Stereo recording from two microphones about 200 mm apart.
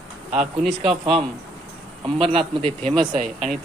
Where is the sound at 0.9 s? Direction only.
25° right (ahead or behind).